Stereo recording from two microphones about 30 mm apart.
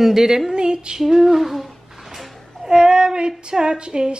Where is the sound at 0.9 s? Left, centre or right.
Centre.